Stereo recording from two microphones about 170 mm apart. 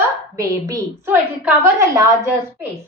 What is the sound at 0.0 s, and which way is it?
A woman's voice, 20° right (ahead or behind).